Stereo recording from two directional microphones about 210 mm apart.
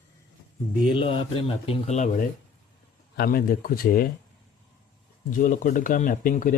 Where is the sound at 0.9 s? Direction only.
25° left (ahead or behind); by 4.1 s 45° left (ahead or behind).